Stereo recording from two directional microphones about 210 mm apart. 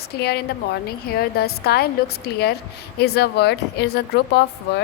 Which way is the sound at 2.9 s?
50° left (ahead or behind).